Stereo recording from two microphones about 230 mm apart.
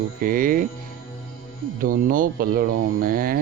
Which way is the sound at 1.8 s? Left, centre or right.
Right.